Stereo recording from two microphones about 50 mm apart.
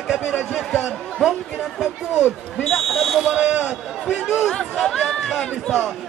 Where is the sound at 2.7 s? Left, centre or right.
Centre.